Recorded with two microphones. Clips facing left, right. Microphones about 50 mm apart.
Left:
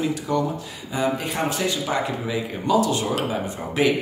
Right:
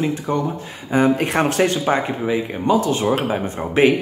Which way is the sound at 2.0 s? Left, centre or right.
Right.